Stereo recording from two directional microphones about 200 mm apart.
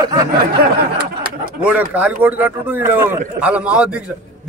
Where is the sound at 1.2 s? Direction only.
50° right (ahead or behind).